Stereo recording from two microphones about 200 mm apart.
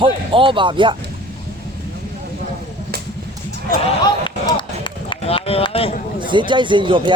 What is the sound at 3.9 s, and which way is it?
Run, 25° left (ahead or behind).